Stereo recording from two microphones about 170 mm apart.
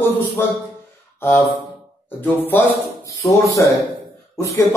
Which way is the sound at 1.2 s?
15° left (ahead or behind).